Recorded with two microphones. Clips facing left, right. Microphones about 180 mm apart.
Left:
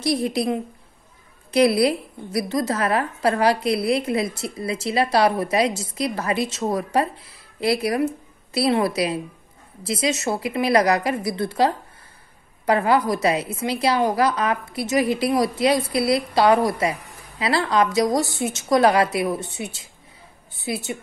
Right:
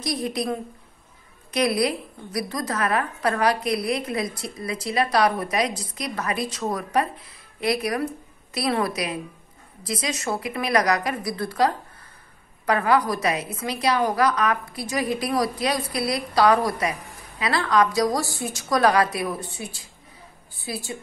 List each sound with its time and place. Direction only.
0.0 s a woman's voice: 25° left (ahead or behind)